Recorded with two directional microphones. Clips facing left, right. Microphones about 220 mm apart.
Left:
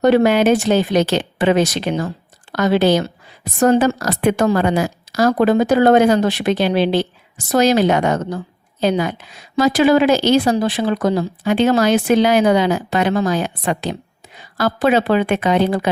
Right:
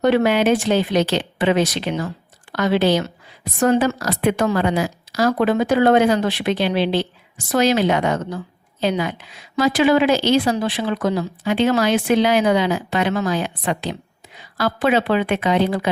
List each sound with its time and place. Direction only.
0.0 s a woman's voice: 40° left (ahead or behind)